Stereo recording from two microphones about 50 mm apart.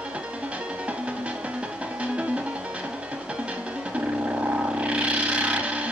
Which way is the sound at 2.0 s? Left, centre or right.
Right.